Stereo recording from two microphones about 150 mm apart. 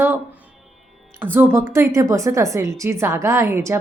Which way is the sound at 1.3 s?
15° right (ahead or behind).